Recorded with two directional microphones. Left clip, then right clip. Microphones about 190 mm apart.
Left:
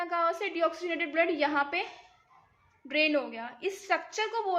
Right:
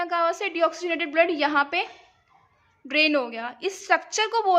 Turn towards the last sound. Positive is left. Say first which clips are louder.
# right 9 dB
turn(degrees=-35)  # may be behind; listen again after turning